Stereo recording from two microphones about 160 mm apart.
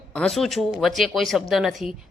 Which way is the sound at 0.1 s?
5° left (ahead or behind).